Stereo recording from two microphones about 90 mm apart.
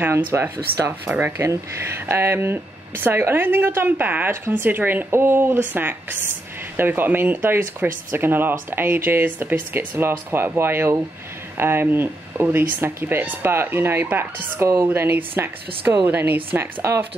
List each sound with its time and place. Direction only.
0.0 s speech: 30° right (ahead or behind)